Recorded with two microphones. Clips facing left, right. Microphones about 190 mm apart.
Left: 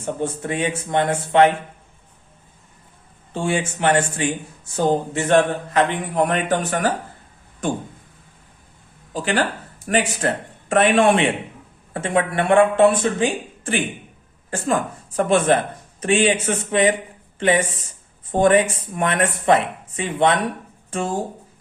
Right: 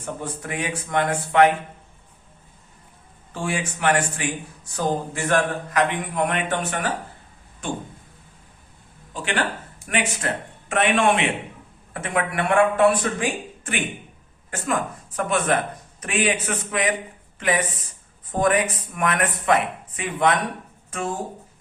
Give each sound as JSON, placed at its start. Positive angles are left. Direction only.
{"t": 0.0, "sound": "speech", "side_deg": 25}
{"t": 3.3, "sound": "speech", "side_deg": 25}
{"t": 9.1, "sound": "a man's voice", "side_deg": 35}